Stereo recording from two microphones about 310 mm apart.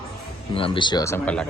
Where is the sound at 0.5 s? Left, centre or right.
Centre.